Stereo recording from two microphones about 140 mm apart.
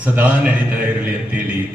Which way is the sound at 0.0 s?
10° right (ahead or behind).